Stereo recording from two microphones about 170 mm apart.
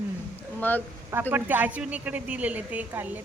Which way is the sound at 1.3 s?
10° right (ahead or behind).